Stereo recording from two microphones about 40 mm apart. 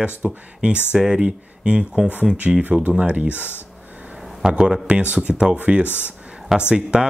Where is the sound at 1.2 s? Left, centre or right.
Right.